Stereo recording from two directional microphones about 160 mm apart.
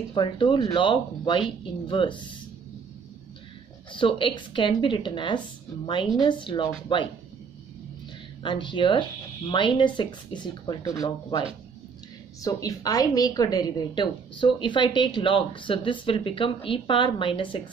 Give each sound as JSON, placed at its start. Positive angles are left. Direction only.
{"t": 0.1, "sound": "speech", "side_deg": 30}
{"t": 3.9, "sound": "speech", "side_deg": 30}
{"t": 8.4, "sound": "a woman's voice", "side_deg": 30}